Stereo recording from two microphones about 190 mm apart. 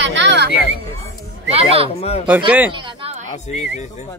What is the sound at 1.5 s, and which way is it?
Speech, 30° right (ahead or behind).